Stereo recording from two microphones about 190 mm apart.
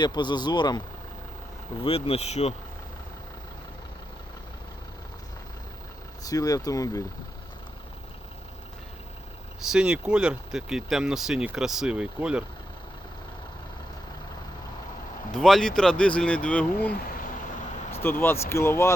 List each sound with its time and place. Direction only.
0.0 s speech: 25° left (ahead or behind)
1.8 s speech: 30° left (ahead or behind)
6.2 s speech: 20° left (ahead or behind)
9.7 s speech: 5° right (ahead or behind)
15.3 s speech: centre (ahead or behind)
17.9 s speech: 10° left (ahead or behind)